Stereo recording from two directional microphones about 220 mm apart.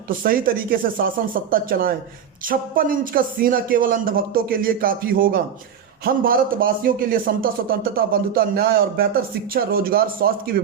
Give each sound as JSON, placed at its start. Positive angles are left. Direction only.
{"t": 0.2, "sound": "speech", "side_deg": -40}